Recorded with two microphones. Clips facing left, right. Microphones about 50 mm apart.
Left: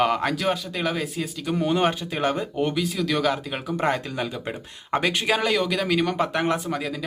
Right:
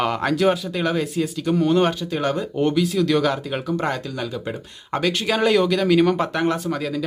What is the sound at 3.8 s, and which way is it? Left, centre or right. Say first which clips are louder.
Speech: even; centre.